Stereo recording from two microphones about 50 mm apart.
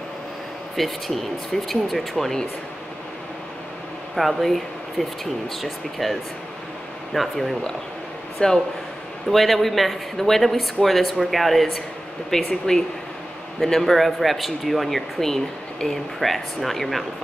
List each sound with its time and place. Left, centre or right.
0.7 s speech: centre
4.1 s speech: centre
7.2 s speech: centre
8.4 s speech: centre
9.3 s speech: centre
12.4 s speech: centre